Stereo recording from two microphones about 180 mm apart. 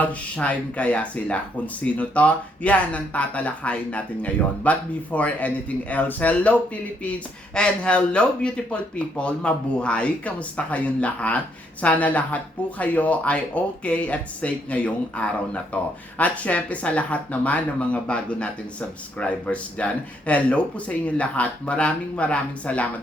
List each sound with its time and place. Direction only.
0.0 s speech: 5° left (ahead or behind)